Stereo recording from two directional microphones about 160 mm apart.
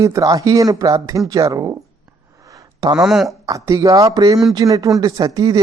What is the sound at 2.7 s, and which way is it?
Speech, 25° right (ahead or behind).